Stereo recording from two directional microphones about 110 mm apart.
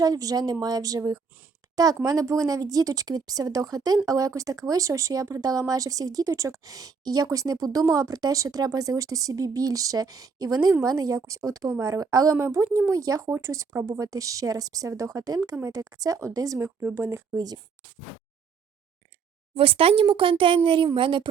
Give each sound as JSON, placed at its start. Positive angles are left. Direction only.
{"t": 0.0, "sound": "speech", "side_deg": -35}
{"t": 17.3, "sound": "speech", "side_deg": -35}
{"t": 19.5, "sound": "speech", "side_deg": -60}